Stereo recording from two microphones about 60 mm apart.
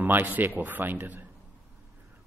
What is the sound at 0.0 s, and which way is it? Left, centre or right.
A man's voice, right.